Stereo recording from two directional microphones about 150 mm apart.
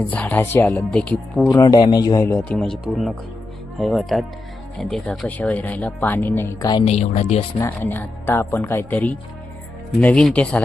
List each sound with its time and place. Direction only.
0.1 s speech: 10° left (ahead or behind)
1.5 s a man's voice: 25° left (ahead or behind)
2.5 s speech: centre (ahead or behind); by 6.8 s 25° left (ahead or behind)
6.8 s speech: 50° left (ahead or behind)
7.6 s speech: 15° left (ahead or behind)